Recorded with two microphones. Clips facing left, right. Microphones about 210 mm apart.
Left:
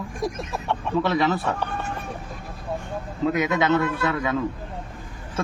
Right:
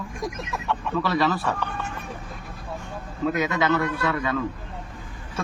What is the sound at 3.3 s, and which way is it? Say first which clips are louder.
Speech: left 2 dB; 20° left (ahead or behind).